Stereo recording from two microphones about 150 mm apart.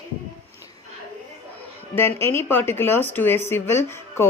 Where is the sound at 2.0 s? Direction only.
15° left (ahead or behind).